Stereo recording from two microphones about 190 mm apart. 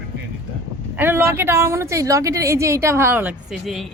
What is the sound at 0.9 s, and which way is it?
A woman's voice, 10° right (ahead or behind).